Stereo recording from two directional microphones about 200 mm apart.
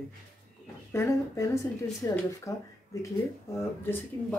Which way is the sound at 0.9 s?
15° left (ahead or behind).